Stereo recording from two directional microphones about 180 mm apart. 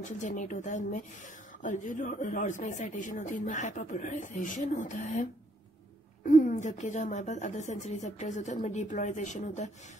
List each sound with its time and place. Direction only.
0.2 s a woman's voice: 45° left (ahead or behind)